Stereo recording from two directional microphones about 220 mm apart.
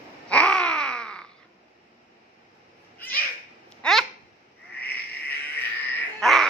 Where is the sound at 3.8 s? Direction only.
5° left (ahead or behind).